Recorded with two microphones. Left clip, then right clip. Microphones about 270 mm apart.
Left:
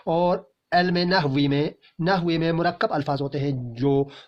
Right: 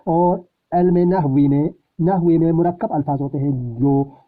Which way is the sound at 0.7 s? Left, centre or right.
Centre.